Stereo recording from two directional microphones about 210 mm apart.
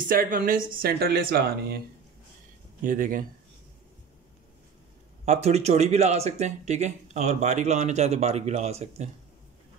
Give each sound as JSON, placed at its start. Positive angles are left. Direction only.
{"t": 0.1, "sound": "speech", "side_deg": -40}
{"t": 2.8, "sound": "speech", "side_deg": -40}
{"t": 5.2, "sound": "speech", "side_deg": -30}